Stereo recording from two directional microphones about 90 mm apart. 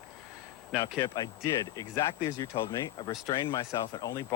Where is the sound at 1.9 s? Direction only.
30° left (ahead or behind).